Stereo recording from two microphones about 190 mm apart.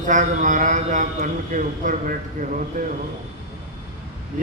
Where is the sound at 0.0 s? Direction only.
40° right (ahead or behind).